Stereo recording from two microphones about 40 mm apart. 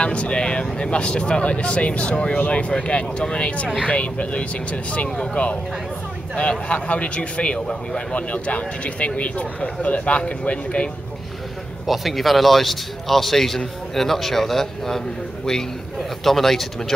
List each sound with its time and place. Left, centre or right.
0.0 s speech: left
6.7 s speech: left
11.8 s a man's voice: centre
16.3 s speech: centre